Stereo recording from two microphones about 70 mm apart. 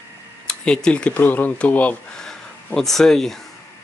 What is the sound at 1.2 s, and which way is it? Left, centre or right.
Speech, left.